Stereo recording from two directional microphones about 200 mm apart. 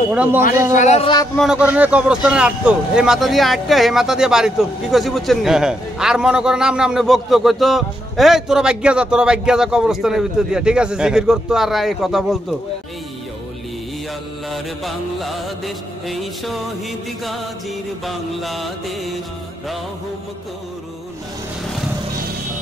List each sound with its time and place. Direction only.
0.1 s speech: 5° right (ahead or behind)
0.7 s speech: 35° left (ahead or behind)
1.3 s speech: centre (ahead or behind)
14.5 s speech: centre (ahead or behind)
18.0 s speech: centre (ahead or behind)